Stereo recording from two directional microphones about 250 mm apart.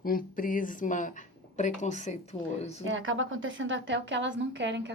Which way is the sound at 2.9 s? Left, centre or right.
Right.